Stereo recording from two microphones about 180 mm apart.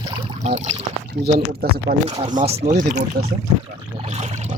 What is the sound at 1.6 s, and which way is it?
Speech, 60° right (ahead or behind).